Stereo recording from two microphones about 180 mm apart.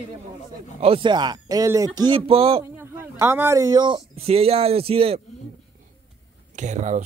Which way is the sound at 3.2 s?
15° right (ahead or behind).